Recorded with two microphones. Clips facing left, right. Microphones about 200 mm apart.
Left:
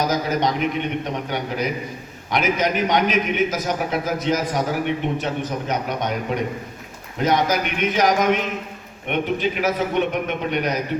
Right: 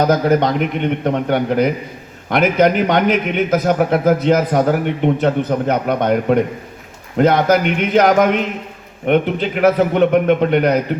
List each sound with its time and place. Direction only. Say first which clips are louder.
0.0 s a man's voice: right 7 dB; 55° right (ahead or behind)